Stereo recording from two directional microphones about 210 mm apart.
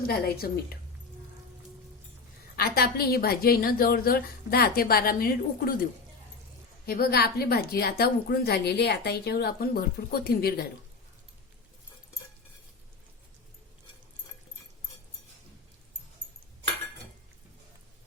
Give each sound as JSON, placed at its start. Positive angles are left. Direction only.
{"t": 0.0, "sound": "a woman's voice", "side_deg": 45}
{"t": 2.6, "sound": "a woman's voice", "side_deg": 45}
{"t": 6.8, "sound": "a woman's voice", "side_deg": 45}